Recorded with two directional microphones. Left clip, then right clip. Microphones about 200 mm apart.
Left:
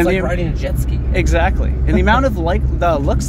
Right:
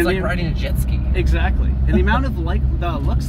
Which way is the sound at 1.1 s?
50° left (ahead or behind).